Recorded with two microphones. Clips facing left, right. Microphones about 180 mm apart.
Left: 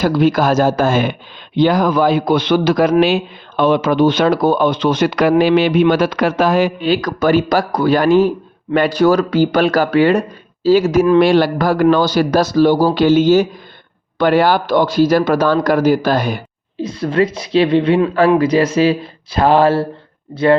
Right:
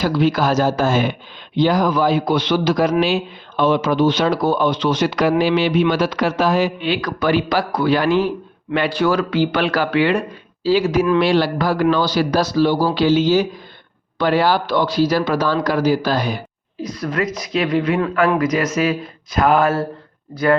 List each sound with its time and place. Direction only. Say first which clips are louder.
0.0 s a man's voice: left 4 dB; 50° left (ahead or behind)
16.8 s speech: left 6 dB; 25° left (ahead or behind)